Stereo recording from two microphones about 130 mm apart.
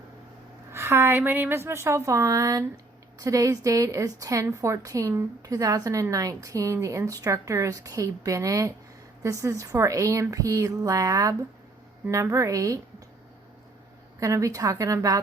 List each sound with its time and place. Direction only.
0.7 s a woman's voice: 20° right (ahead or behind)
14.2 s a woman's voice: 25° right (ahead or behind)